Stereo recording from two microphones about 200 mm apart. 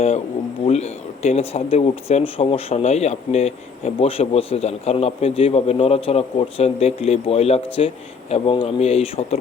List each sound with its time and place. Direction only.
0.6 s speech: 30° left (ahead or behind)